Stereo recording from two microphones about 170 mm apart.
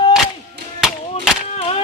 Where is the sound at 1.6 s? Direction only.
35° left (ahead or behind).